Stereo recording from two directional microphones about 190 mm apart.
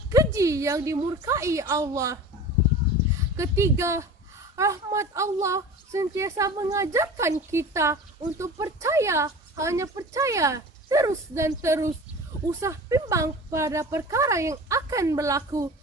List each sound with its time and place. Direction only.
0.3 s a woman's voice: 15° right (ahead or behind)
3.3 s speech: 15° right (ahead or behind)